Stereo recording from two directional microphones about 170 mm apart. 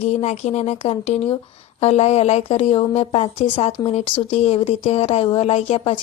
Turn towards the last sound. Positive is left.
turn(degrees=35)  # may be behind; listen again after turning